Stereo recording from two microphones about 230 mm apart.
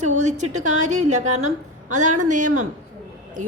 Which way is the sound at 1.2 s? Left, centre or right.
Right.